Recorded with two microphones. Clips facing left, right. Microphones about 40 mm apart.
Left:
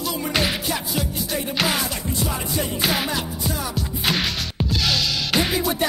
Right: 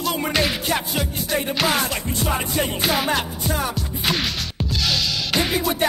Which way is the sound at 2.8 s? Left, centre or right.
Centre.